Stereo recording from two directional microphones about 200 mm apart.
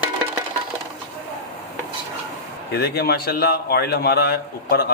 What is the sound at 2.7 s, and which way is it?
A man's voice, 50° left (ahead or behind).